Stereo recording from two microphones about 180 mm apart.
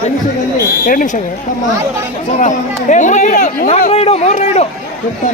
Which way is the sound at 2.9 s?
40° left (ahead or behind).